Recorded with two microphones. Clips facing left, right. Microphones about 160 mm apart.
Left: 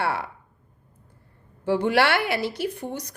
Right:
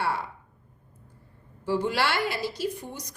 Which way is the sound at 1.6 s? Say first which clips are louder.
Left 5 dB; 65° left (ahead or behind).